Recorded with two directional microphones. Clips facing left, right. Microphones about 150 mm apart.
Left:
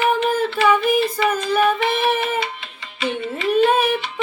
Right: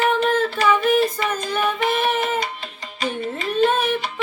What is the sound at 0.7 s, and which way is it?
Singing, 10° left (ahead or behind).